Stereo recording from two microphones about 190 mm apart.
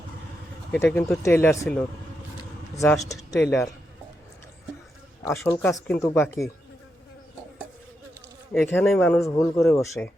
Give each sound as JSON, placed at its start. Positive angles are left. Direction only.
{"t": 0.7, "sound": "a man's voice", "side_deg": 10}
{"t": 5.2, "sound": "a man's voice", "side_deg": 10}
{"t": 8.5, "sound": "a man's voice", "side_deg": 10}